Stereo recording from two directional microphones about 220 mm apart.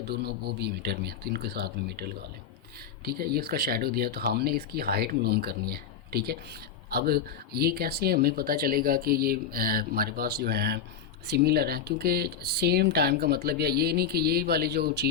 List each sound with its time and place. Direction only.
0.1 s speech: 45° right (ahead or behind)